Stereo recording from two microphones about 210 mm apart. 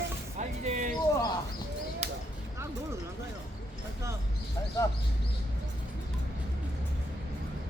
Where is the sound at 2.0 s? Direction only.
30° right (ahead or behind).